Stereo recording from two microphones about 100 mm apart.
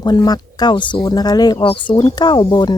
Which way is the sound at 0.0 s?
45° left (ahead or behind).